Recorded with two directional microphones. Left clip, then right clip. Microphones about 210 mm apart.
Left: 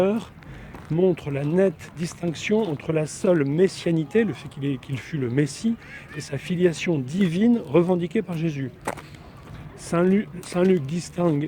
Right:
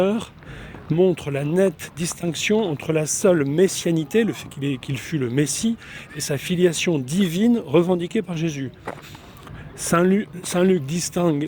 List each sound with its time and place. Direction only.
0.0 s speech: 50° right (ahead or behind)
9.8 s speech: 50° right (ahead or behind)